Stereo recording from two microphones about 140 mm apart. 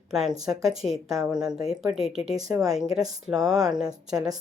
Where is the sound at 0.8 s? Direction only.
Centre (ahead or behind).